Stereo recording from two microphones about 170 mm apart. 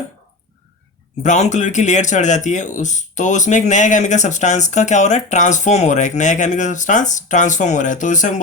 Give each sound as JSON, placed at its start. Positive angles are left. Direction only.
{"t": 1.2, "sound": "speech", "side_deg": 45}